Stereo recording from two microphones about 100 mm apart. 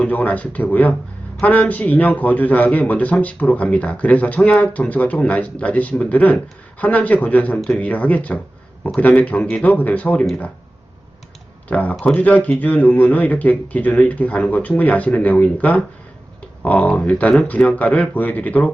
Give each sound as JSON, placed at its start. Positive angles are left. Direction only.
{"t": 0.0, "sound": "a man's voice", "side_deg": 15}
{"t": 11.7, "sound": "a man's voice", "side_deg": 15}